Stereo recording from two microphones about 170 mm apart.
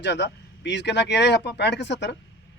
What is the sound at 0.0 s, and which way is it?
Speech, 90° left.